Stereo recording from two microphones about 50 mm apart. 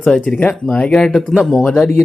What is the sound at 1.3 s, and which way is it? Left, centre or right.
Speech, centre.